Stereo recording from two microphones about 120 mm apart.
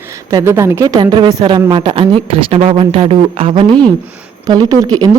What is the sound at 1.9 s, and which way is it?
Speech, 50° right (ahead or behind).